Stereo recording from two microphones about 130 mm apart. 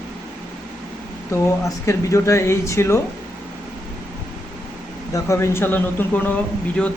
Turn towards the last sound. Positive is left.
turn(degrees=10)  # may be behind; listen again after turning